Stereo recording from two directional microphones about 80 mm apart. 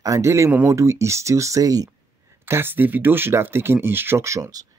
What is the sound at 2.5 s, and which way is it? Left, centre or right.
Speech, right.